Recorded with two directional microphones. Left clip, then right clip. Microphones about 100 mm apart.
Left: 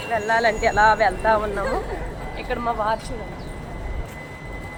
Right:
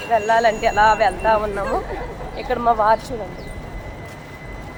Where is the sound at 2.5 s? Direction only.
30° right (ahead or behind).